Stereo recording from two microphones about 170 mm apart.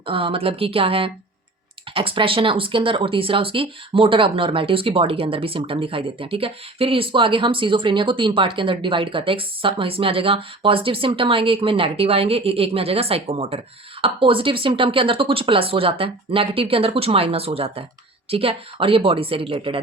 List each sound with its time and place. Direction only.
0.0 s speech: 30° right (ahead or behind)